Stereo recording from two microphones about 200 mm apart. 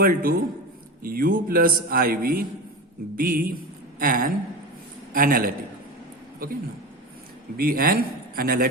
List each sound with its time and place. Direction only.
0.0 s a man's voice: 45° right (ahead or behind)